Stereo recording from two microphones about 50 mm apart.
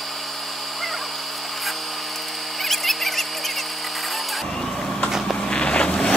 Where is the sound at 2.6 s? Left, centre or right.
Centre.